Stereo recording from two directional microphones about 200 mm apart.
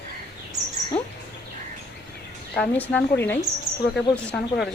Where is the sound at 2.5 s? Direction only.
5° left (ahead or behind).